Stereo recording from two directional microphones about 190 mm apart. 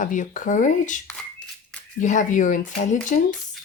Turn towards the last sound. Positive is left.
turn(degrees=40)  # may be behind; listen again after turning